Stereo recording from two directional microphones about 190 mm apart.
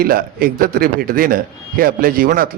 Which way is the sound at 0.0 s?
50° right (ahead or behind).